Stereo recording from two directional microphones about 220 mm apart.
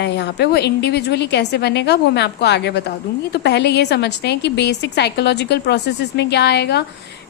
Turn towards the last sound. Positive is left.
turn(degrees=50)  # may be behind; listen again after turning